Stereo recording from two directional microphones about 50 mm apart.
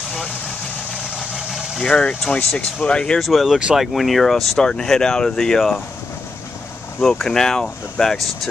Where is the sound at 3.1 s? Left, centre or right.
Centre.